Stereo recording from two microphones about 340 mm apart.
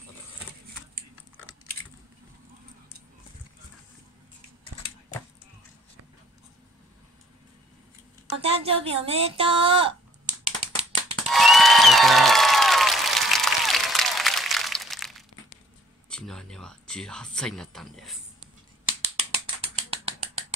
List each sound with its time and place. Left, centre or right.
8.4 s speech: centre
11.2 s applause: centre
16.1 s speech: centre
19.3 s mechanisms: centre